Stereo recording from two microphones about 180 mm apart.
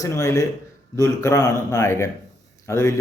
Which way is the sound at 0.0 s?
15° left (ahead or behind).